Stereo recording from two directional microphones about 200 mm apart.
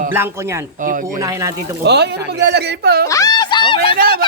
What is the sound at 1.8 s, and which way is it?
Speech, 60° right (ahead or behind).